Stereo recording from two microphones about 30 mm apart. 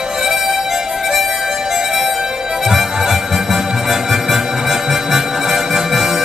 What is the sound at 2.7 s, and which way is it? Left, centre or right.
Music, centre.